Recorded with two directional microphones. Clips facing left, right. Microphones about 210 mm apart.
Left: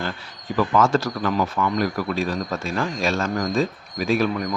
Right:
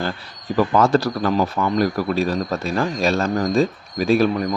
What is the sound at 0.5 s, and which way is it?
Speech, 35° right (ahead or behind).